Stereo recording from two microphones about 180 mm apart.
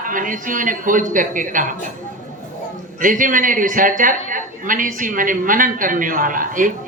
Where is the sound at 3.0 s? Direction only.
45° right (ahead or behind).